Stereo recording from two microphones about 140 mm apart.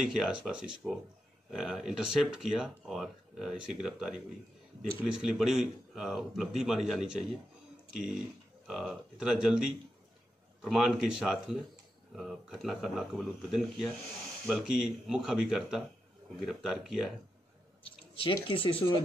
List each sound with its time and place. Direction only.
0.0 s speech: 5° right (ahead or behind)
8.6 s speech: 5° right (ahead or behind)
17.8 s speech: 40° left (ahead or behind)